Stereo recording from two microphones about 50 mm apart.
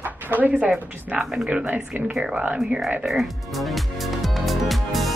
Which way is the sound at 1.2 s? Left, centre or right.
Centre.